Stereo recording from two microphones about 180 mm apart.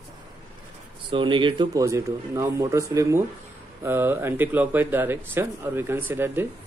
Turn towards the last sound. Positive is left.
turn(degrees=-15)  # may be behind; listen again after turning